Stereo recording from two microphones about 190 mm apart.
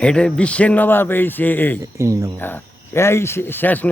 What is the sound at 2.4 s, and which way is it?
A man's voice, 10° left (ahead or behind).